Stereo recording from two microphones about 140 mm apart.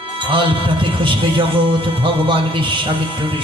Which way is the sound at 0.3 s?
35° right (ahead or behind).